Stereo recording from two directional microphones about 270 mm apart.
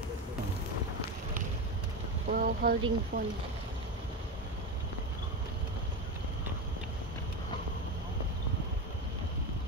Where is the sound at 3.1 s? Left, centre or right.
Right.